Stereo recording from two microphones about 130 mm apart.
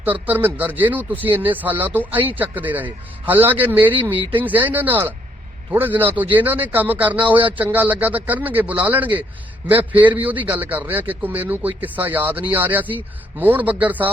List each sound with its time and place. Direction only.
0.0 s a man's voice: 15° right (ahead or behind)
4.1 s speech: 40° right (ahead or behind)
4.4 s a man's voice: 15° right (ahead or behind)
7.3 s speech: 40° right (ahead or behind)
7.6 s a man's voice: 15° right (ahead or behind)